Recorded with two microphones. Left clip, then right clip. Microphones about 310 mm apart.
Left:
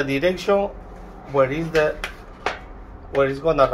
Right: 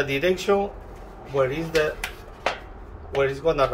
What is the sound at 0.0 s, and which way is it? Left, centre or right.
Speech, centre.